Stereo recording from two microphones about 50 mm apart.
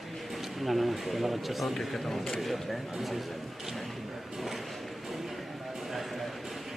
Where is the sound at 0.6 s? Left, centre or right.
Centre.